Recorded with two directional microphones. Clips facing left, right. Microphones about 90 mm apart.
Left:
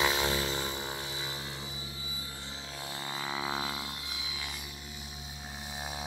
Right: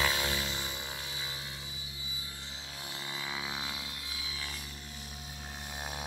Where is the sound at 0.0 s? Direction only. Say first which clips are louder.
Left 3 dB; 25° left (ahead or behind).